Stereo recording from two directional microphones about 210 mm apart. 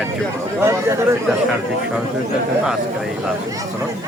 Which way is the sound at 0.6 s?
15° right (ahead or behind).